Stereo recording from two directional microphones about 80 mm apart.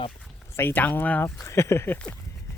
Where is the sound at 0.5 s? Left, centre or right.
Left.